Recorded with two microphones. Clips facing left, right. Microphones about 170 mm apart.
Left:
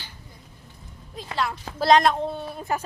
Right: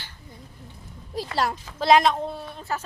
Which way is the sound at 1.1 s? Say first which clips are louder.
Right 3 dB; 40° right (ahead or behind).